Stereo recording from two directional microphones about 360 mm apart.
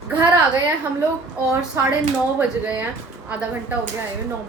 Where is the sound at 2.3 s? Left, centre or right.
Centre.